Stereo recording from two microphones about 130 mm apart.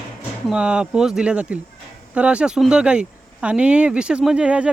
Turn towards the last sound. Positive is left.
turn(degrees=-10)  # may be behind; listen again after turning